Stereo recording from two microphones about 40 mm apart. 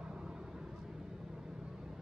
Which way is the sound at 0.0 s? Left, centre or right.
Centre.